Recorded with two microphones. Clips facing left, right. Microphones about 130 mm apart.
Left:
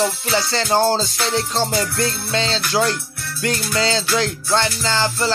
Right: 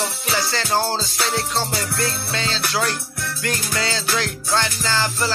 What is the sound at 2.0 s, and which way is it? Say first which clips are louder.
Music: left 3 dB; 30° left (ahead or behind).